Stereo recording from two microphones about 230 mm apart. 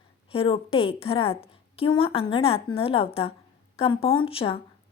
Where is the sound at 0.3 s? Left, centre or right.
Left.